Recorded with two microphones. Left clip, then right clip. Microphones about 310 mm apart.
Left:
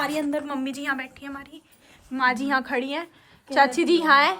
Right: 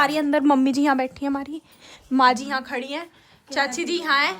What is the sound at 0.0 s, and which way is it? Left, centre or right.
A woman's voice, right.